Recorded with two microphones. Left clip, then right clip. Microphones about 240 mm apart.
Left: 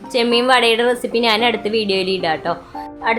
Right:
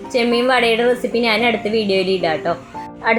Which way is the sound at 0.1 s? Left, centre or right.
Centre.